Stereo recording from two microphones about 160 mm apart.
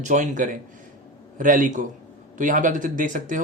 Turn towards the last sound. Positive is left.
turn(degrees=-55)  # may be behind; listen again after turning